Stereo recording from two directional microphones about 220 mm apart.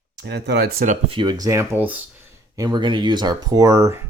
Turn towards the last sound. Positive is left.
turn(degrees=-15)  # may be behind; listen again after turning